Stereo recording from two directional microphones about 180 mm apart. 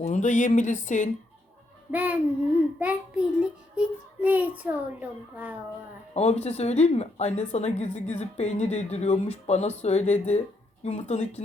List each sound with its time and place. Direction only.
0.0 s speech: 40° left (ahead or behind)
1.9 s child singing: 10° right (ahead or behind)
6.1 s a woman's voice: 35° left (ahead or behind)